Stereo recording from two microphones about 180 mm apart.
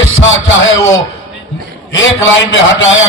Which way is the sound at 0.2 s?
90° left.